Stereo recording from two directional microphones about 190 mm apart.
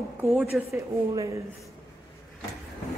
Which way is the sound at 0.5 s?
5° right (ahead or behind).